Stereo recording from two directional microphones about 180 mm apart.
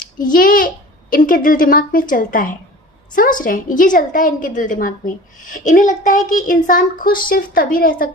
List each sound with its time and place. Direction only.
0.2 s a woman's voice: 50° left (ahead or behind)